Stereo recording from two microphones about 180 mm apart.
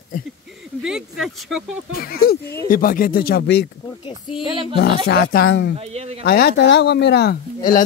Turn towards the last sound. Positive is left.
turn(degrees=55)  # may be behind; listen again after turning